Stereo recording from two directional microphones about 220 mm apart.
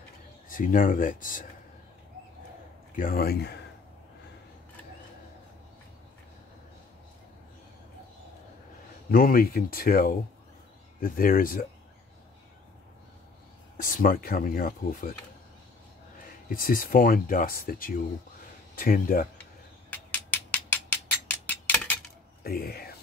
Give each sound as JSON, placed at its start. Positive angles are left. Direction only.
{"t": 0.5, "sound": "speech", "side_deg": 40}
{"t": 3.0, "sound": "speech", "side_deg": 40}
{"t": 9.1, "sound": "speech", "side_deg": 40}
{"t": 13.8, "sound": "speech", "side_deg": 40}
{"t": 16.4, "sound": "speech", "side_deg": 40}
{"t": 19.9, "sound": "a sound", "side_deg": 10}
{"t": 22.4, "sound": "speech", "side_deg": 45}